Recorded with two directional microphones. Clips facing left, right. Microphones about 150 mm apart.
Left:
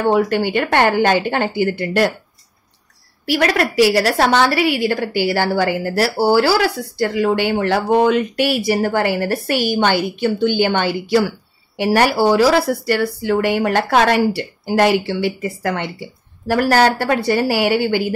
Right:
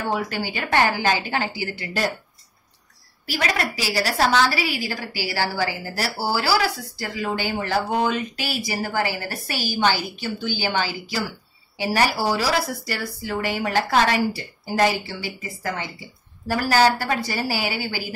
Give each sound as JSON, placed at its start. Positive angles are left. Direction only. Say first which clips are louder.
{"t": 0.1, "sound": "a woman's voice", "louder": "left 10 dB", "side_deg": 60}
{"t": 3.3, "sound": "a woman's voice", "louder": "left 8 dB", "side_deg": 60}